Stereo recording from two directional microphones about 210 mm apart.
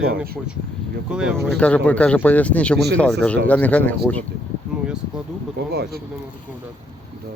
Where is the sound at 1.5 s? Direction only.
5° left (ahead or behind).